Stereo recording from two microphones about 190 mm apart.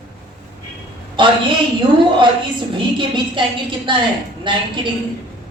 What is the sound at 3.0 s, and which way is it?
A woman's voice, 25° right (ahead or behind).